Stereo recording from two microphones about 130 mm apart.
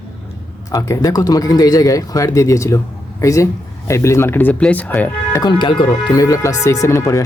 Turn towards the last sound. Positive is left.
turn(degrees=20)  # may be behind; listen again after turning